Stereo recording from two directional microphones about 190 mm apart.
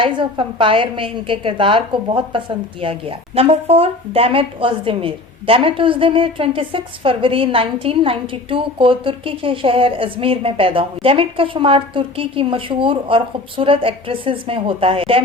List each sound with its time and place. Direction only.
0.0 s a woman's voice: 25° right (ahead or behind)